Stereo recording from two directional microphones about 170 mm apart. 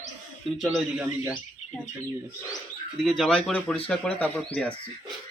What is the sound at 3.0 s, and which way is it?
Speech, centre (ahead or behind).